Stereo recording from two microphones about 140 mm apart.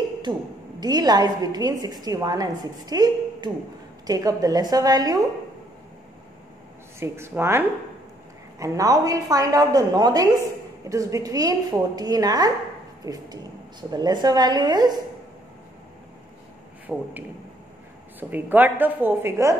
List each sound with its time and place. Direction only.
0.2 s a woman's voice: 30° right (ahead or behind)
7.0 s a woman's voice: 20° right (ahead or behind)
16.8 s a man's voice: 10° right (ahead or behind)
18.3 s a woman's voice: 15° right (ahead or behind)